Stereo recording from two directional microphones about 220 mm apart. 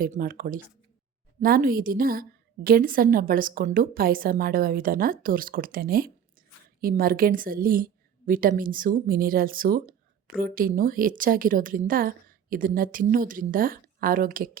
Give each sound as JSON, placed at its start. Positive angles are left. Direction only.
{"t": 0.0, "sound": "a woman's voice", "side_deg": -40}